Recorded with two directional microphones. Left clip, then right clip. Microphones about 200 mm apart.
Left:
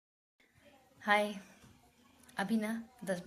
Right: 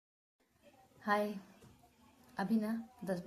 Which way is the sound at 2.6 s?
5° left (ahead or behind).